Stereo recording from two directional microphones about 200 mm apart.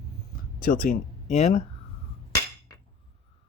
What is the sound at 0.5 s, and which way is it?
Speech, 45° left (ahead or behind).